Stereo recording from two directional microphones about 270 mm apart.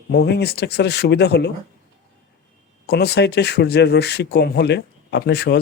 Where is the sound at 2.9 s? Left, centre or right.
Left.